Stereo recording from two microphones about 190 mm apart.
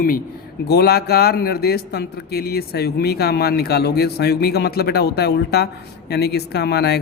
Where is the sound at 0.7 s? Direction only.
55° left (ahead or behind).